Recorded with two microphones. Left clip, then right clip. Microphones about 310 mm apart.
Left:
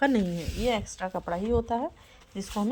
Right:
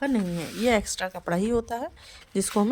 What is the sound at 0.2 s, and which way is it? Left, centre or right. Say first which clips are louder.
Speech: right 2 dB; centre.